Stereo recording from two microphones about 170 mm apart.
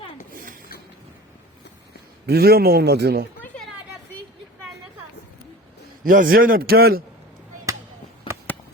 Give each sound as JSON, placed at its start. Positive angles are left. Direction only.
{"t": 2.2, "sound": "a man's voice", "side_deg": -70}
{"t": 6.1, "sound": "speech", "side_deg": -55}